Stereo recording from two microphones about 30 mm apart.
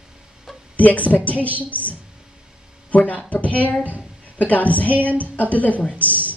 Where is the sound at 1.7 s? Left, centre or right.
Right.